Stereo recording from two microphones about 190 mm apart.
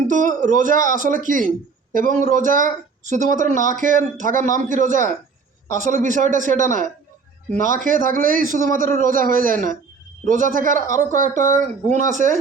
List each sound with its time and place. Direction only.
0.1 s speech: 40° right (ahead or behind)